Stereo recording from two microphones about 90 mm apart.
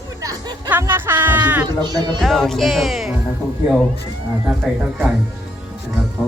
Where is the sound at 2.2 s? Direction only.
5° left (ahead or behind).